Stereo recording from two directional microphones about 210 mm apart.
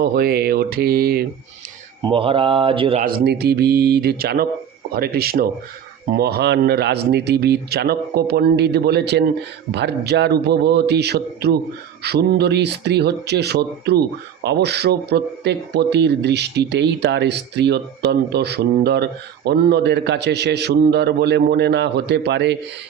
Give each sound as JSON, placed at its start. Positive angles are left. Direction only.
{"t": 0.0, "sound": "speech", "side_deg": -50}
{"t": 2.0, "sound": "speech", "side_deg": -25}
{"t": 3.0, "sound": "speech", "side_deg": -45}